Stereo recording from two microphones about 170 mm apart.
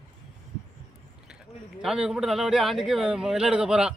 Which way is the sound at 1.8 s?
5° right (ahead or behind).